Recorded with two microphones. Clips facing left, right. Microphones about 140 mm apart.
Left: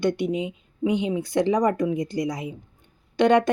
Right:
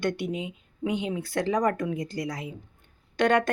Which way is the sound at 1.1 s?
15° left (ahead or behind).